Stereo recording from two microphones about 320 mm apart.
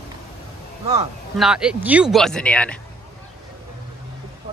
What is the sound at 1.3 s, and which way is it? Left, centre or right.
Speech, centre.